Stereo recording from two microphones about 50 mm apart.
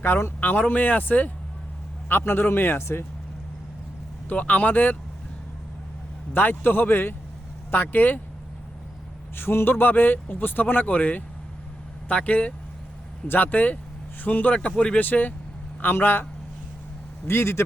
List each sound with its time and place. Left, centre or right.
0.0 s a man's voice: left
0.3 s a man's voice: left
2.0 s a man's voice: left
4.3 s a man's voice: left
6.3 s a man's voice: left
9.3 s a man's voice: left
13.2 s a man's voice: left
14.9 s a man's voice: left
17.2 s speech: left